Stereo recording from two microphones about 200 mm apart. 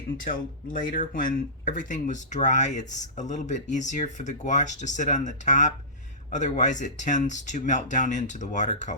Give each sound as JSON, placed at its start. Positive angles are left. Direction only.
{"t": 0.3, "sound": "speech", "side_deg": 45}